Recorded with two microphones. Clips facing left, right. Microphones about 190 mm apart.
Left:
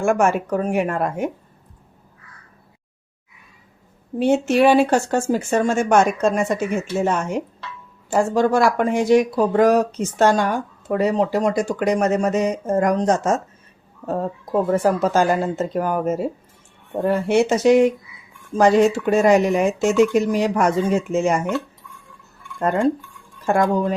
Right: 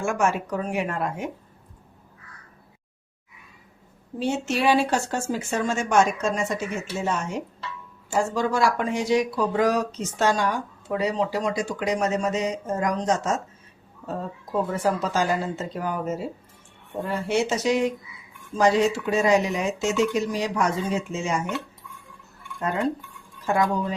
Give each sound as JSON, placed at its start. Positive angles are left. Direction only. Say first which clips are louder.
{"t": 0.0, "sound": "speech", "louder": "left 6 dB", "side_deg": 55}
{"t": 4.2, "sound": "speech", "louder": "left 9 dB", "side_deg": 55}
{"t": 22.6, "sound": "speech", "louder": "left 7 dB", "side_deg": 55}